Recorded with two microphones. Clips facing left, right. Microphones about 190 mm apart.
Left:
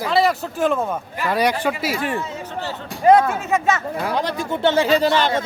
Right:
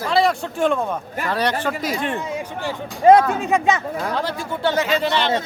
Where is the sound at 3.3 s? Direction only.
15° right (ahead or behind).